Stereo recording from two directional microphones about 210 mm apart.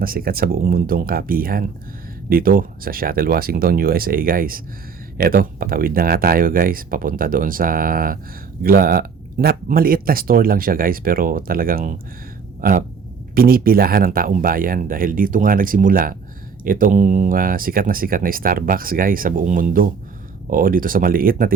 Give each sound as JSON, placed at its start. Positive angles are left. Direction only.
{"t": 0.0, "sound": "speech", "side_deg": -45}
{"t": 13.3, "sound": "speech", "side_deg": -45}